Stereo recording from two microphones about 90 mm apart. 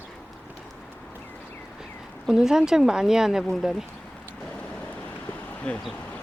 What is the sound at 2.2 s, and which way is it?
Speech, 5° right (ahead or behind).